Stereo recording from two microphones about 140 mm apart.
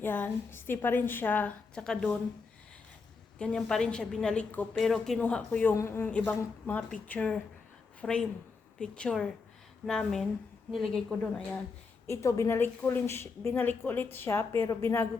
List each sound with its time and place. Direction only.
0.0 s a woman's voice: 15° left (ahead or behind)
3.3 s a woman's voice: 5° left (ahead or behind)
12.0 s a woman's voice: 20° left (ahead or behind)